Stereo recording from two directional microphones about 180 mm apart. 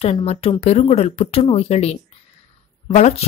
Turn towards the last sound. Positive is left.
turn(degrees=35)  # may be behind; listen again after turning